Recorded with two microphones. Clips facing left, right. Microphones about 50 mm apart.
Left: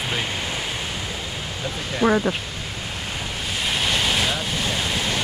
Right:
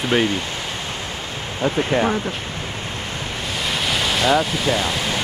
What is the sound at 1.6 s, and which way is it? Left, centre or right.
Speech, right.